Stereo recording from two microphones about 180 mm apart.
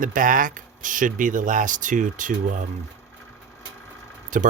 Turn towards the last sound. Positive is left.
turn(degrees=-45)  # may be behind; listen again after turning